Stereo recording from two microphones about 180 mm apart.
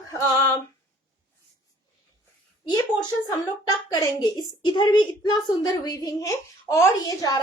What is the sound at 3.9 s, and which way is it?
A woman's voice, 20° left (ahead or behind).